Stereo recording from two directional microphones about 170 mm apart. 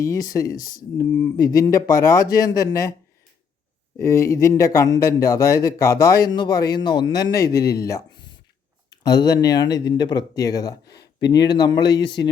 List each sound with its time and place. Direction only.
0.0 s speech: 20° left (ahead or behind)
0.5 s speech: 55° left (ahead or behind)
0.9 s speech: 20° left (ahead or behind)
3.9 s speech: 15° left (ahead or behind)
10.8 s speech: 75° left (ahead or behind)
11.2 s speech: 25° left (ahead or behind)